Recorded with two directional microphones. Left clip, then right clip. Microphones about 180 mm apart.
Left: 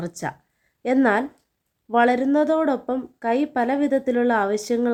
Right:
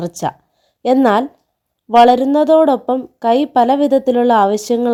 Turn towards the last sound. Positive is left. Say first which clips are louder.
# right 8 dB
turn(degrees=-30)  # may be behind; listen again after turning